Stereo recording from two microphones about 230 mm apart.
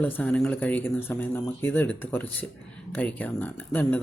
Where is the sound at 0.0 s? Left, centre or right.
Centre.